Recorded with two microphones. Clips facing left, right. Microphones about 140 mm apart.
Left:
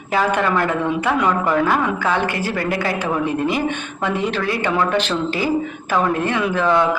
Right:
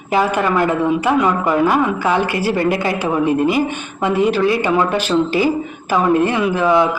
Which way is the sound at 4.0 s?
10° right (ahead or behind).